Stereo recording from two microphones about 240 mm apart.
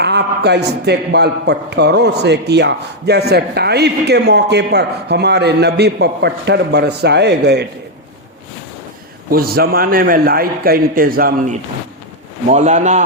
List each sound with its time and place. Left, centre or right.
0.0 s a man's voice: right
9.3 s a man's voice: right